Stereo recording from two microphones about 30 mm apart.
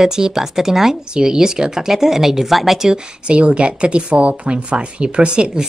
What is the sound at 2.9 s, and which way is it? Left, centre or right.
Speech, right.